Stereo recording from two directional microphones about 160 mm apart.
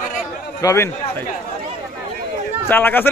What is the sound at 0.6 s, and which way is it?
Speech, 20° left (ahead or behind).